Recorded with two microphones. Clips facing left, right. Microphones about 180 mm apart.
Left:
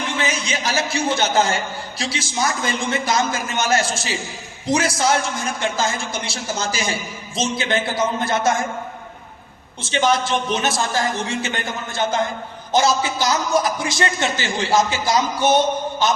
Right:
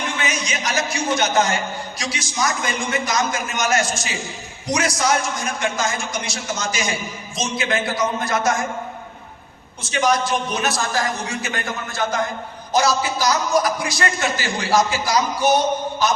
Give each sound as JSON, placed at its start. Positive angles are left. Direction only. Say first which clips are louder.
{"t": 0.2, "sound": "a man's voice", "louder": "left 2 dB", "side_deg": 30}
{"t": 9.8, "sound": "a man's voice", "louder": "left 1 dB", "side_deg": 25}